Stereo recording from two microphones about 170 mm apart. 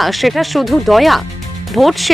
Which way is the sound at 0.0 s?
Centre (ahead or behind).